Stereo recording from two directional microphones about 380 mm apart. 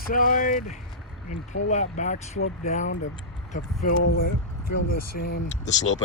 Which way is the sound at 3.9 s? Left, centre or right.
Left.